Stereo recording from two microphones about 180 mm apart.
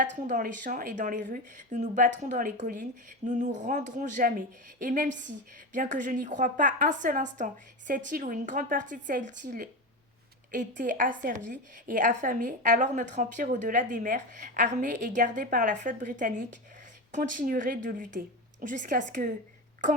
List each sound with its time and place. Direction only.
0.2 s a woman's voice: 45° right (ahead or behind)